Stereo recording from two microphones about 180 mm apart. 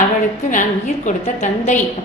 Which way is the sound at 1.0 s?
40° left (ahead or behind).